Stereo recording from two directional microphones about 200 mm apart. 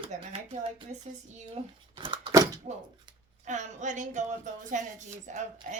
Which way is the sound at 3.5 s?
35° right (ahead or behind).